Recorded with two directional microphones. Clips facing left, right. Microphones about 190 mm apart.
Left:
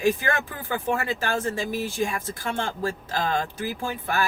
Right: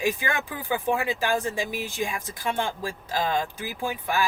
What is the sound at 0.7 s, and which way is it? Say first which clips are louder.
Speech: right 1 dB; 15° right (ahead or behind).